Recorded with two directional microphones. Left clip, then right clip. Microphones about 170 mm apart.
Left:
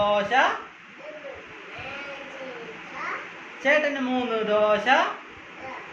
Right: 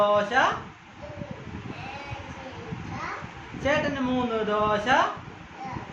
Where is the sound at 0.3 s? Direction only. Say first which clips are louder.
Left 3 dB; 35° right (ahead or behind).